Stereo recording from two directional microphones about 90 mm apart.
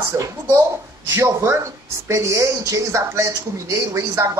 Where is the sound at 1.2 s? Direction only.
30° right (ahead or behind).